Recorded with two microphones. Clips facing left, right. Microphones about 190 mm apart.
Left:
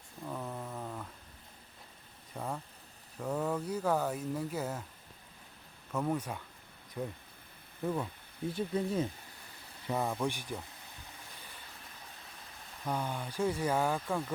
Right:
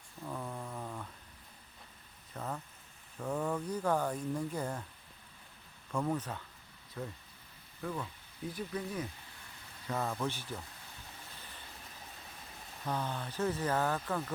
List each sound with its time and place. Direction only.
0.3 s a sound: 5° left (ahead or behind)
2.3 s a sound: 10° left (ahead or behind)
3.2 s speech: 5° left (ahead or behind)
5.9 s speech: 5° left (ahead or behind)
8.4 s speech: 25° left (ahead or behind)
9.8 s speech: 15° left (ahead or behind)
12.8 s speech: 10° left (ahead or behind)